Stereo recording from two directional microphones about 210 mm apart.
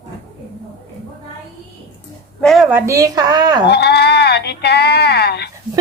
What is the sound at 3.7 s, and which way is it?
Sheep, 50° left (ahead or behind).